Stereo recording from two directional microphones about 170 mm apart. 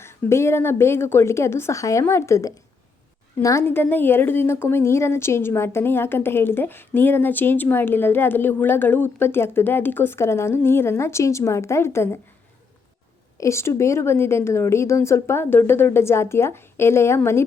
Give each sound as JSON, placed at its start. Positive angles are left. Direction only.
{"t": 0.0, "sound": "a woman's voice", "side_deg": 15}
{"t": 13.4, "sound": "a woman's voice", "side_deg": 15}